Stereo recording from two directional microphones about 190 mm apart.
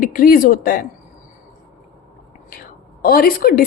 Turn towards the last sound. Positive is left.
turn(degrees=50)  # may be behind; listen again after turning